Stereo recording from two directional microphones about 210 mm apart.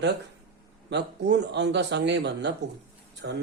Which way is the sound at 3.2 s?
55° right (ahead or behind).